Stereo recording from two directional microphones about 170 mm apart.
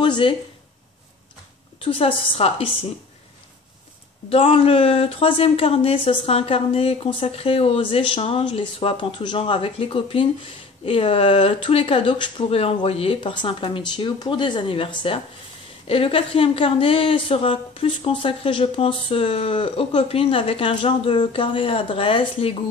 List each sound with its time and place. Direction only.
0.0 s speech: 30° left (ahead or behind)
1.8 s a woman's voice: 30° left (ahead or behind)
4.3 s a woman's voice: 35° left (ahead or behind)